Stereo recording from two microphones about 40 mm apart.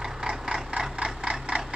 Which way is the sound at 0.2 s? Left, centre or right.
Centre.